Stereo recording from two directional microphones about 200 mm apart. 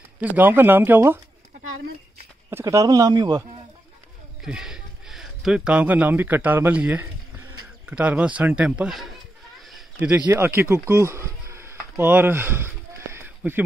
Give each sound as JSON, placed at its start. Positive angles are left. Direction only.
{"t": 0.2, "sound": "speech", "side_deg": -10}
{"t": 2.5, "sound": "speech", "side_deg": -15}
{"t": 4.4, "sound": "speech", "side_deg": -5}
{"t": 9.6, "sound": "a sound", "side_deg": 0}
{"t": 9.9, "sound": "speech", "side_deg": -10}